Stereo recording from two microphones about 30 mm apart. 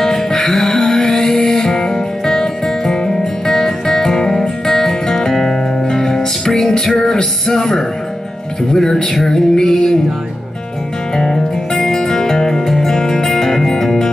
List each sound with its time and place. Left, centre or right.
0.0 s music: centre
11.1 s music: centre